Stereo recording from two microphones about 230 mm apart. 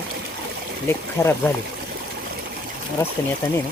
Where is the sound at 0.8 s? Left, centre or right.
Centre.